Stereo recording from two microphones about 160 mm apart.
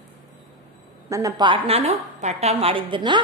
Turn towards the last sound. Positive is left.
turn(degrees=-30)  # may be behind; listen again after turning